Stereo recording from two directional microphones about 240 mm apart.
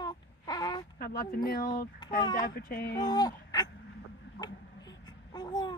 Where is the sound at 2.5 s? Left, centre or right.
Left.